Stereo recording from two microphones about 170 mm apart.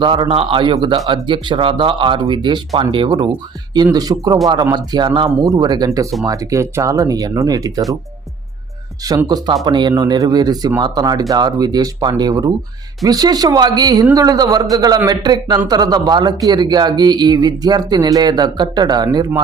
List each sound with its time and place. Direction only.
0.0 s speech: 30° right (ahead or behind)
9.0 s speech: 20° right (ahead or behind)